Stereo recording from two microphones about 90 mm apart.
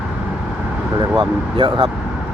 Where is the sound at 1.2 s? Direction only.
70° right (ahead or behind).